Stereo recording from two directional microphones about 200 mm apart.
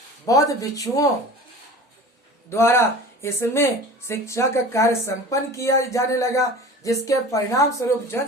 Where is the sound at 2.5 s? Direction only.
15° left (ahead or behind).